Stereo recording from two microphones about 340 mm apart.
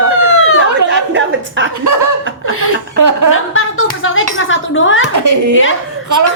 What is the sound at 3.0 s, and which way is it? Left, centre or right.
Speech, right.